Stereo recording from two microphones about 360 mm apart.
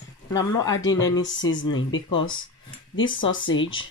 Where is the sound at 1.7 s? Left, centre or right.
Left.